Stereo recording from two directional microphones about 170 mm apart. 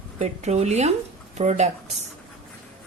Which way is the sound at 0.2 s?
40° right (ahead or behind).